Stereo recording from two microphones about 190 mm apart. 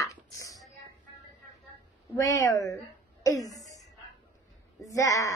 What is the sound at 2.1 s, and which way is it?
A woman's voice, 15° left (ahead or behind).